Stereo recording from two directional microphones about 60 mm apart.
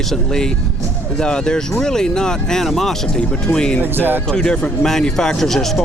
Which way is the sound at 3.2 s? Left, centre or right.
Centre.